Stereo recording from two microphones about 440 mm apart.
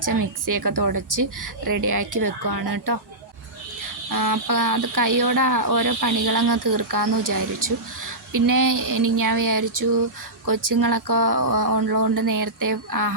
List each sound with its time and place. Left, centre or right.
0.0 s speech: right
4.1 s speech: right